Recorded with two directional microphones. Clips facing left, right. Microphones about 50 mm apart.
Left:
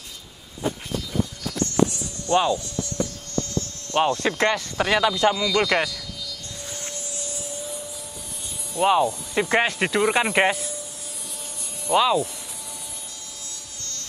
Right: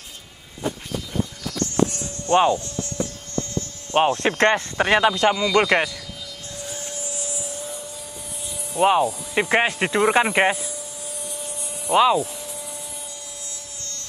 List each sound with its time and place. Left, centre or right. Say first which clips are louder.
2.2 s speech: right 3 dB; right
3.9 s speech: right 2 dB; right
4.7 s speech: right 3 dB; right
8.7 s speech: right 1 dB; right
9.9 s speech: right 3 dB; centre
11.9 s speech: right 2 dB; centre